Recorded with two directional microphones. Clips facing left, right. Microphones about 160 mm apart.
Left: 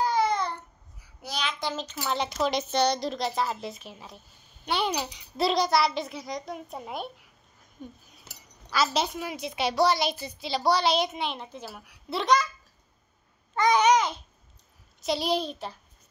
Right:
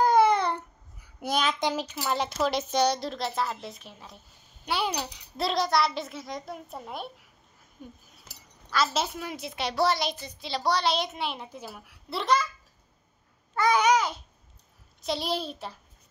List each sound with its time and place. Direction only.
0.0 s babbling: 55° right (ahead or behind)
1.2 s child singing: 45° right (ahead or behind)
1.6 s a child's voice: 15° right (ahead or behind)
7.8 s babbling: 10° right (ahead or behind)
8.6 s a child's voice: centre (ahead or behind)
13.6 s babbling: 10° right (ahead or behind)
15.0 s a child's voice: centre (ahead or behind)